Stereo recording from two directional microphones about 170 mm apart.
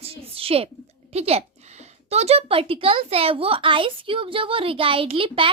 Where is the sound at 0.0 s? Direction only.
35° right (ahead or behind).